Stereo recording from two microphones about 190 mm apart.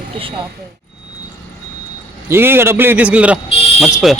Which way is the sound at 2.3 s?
10° right (ahead or behind).